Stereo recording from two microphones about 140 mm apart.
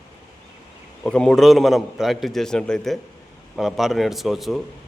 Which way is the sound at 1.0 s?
5° left (ahead or behind).